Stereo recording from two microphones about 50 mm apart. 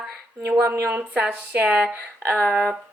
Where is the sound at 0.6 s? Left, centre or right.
Right.